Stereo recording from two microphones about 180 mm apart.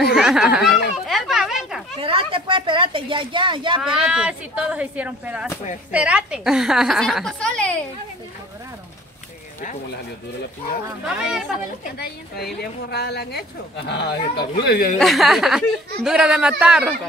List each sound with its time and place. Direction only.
0.0 s speech: centre (ahead or behind)
1.0 s a sound: centre (ahead or behind)
2.0 s speech: 30° right (ahead or behind)
3.8 s speech: 5° right (ahead or behind)
11.2 s speech: 5° right (ahead or behind)
11.8 s speech: 60° left (ahead or behind)
15.0 s speech: centre (ahead or behind)